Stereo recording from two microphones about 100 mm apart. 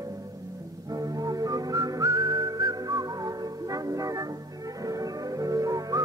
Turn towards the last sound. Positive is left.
turn(degrees=-35)  # may be behind; listen again after turning